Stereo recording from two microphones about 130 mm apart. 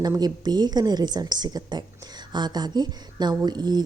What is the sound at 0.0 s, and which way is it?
A woman's voice, 30° right (ahead or behind).